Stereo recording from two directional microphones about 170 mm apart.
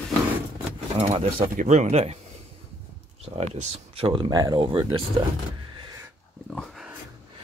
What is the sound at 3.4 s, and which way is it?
Speech, 35° right (ahead or behind).